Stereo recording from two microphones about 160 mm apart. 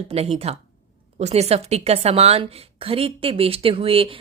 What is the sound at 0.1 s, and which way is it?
A woman's voice, 40° right (ahead or behind).